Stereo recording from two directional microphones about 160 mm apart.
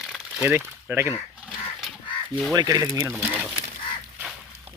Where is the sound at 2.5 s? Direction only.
25° right (ahead or behind).